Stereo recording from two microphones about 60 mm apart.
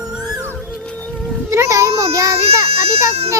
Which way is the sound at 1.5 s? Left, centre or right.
Right.